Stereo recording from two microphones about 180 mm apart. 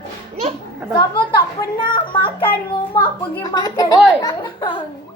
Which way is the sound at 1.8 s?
30° left (ahead or behind).